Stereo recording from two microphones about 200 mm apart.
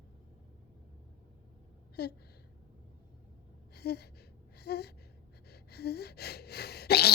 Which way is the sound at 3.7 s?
55° left (ahead or behind).